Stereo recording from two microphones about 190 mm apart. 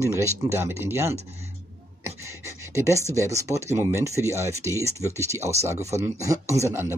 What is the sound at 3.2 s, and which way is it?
Speech, 15° right (ahead or behind).